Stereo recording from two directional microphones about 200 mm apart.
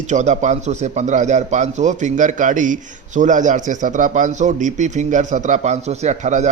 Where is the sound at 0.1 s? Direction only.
35° right (ahead or behind).